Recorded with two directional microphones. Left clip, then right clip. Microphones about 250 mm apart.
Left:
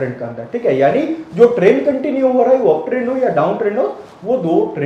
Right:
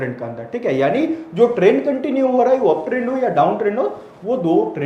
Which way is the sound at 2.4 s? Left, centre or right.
Centre.